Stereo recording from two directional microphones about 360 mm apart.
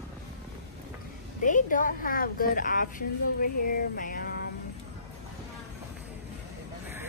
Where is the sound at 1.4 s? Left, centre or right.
Left.